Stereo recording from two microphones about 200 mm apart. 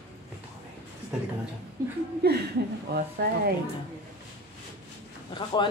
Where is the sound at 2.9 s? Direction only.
50° right (ahead or behind).